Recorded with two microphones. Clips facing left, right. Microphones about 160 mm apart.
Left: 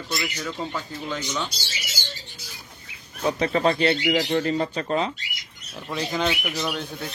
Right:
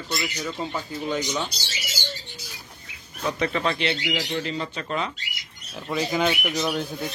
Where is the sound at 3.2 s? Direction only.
35° left (ahead or behind).